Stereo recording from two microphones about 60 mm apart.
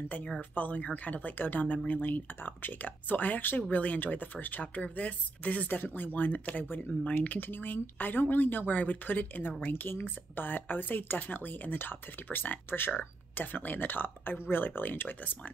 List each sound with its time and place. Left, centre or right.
0.4 s speech: left